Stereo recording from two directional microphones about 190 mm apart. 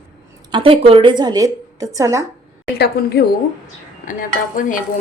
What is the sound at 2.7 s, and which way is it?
Speech, 55° left (ahead or behind).